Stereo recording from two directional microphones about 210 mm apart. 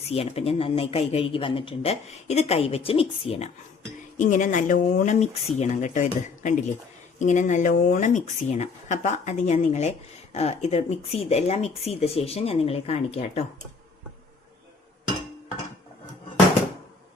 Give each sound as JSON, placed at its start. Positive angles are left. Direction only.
{"t": 0.0, "sound": "speech", "side_deg": 30}